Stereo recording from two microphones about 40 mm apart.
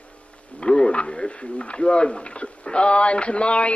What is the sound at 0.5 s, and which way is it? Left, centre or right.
Speech, left.